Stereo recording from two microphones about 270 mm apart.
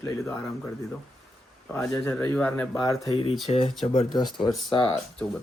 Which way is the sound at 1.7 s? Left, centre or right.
Centre.